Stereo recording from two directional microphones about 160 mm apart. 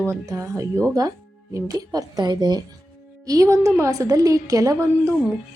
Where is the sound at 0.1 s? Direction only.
20° right (ahead or behind).